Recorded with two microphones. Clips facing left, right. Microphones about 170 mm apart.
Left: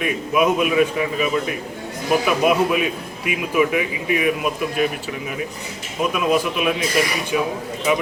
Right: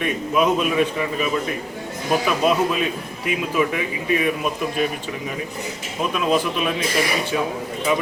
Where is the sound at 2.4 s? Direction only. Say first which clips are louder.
Left 1 dB; 10° left (ahead or behind).